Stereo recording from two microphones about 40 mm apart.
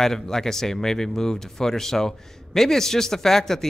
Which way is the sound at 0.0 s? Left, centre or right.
Centre.